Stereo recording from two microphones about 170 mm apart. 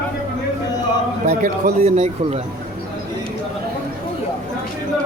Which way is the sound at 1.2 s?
45° right (ahead or behind).